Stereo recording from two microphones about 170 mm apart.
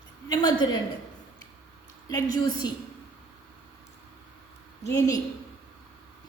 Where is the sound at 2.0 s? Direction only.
20° left (ahead or behind).